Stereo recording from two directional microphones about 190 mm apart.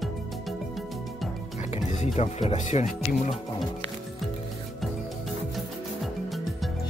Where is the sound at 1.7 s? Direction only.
35° left (ahead or behind).